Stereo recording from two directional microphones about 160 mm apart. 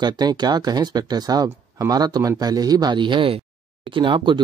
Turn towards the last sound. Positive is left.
turn(degrees=-30)  # may be behind; listen again after turning